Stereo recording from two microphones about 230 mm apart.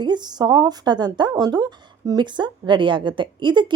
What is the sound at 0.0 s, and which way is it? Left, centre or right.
Speech, centre.